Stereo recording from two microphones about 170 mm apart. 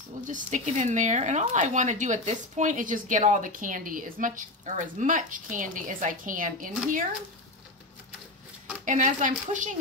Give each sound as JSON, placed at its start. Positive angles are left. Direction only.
{"t": 0.2, "sound": "speech", "side_deg": -50}
{"t": 8.8, "sound": "speech", "side_deg": -50}